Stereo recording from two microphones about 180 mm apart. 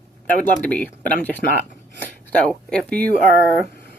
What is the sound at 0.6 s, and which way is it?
Speech, 10° left (ahead or behind).